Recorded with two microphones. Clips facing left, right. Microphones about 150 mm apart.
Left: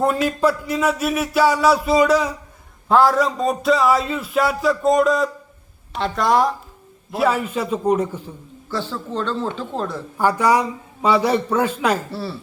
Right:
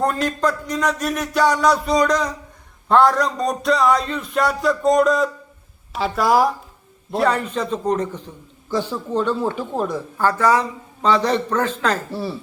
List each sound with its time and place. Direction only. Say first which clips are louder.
0.0 s a man's voice: left 2 dB; 5° left (ahead or behind)
8.7 s speech: right 4 dB; 15° right (ahead or behind)
10.2 s a man's voice: left 1 dB; 15° left (ahead or behind)
12.1 s speech: right 2 dB; 15° right (ahead or behind)